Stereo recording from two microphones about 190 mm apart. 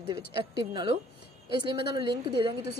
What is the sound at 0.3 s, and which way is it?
A woman's voice, 25° right (ahead or behind).